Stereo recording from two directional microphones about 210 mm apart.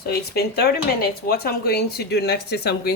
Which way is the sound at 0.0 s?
50° left (ahead or behind).